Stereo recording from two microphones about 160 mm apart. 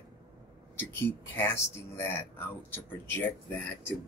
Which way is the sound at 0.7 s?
15° left (ahead or behind).